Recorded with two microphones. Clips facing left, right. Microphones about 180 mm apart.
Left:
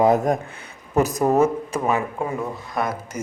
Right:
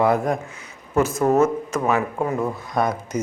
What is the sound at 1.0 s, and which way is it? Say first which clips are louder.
Speech: even; 40° left (ahead or behind).